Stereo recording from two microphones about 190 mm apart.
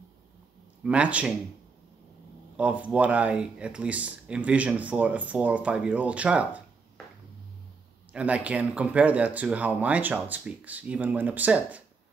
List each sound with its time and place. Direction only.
0.8 s speech: 5° right (ahead or behind)
2.5 s speech: 5° right (ahead or behind)
8.1 s speech: 5° right (ahead or behind)